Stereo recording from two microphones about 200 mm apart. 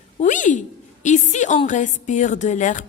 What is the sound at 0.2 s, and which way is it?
Speech, 40° left (ahead or behind).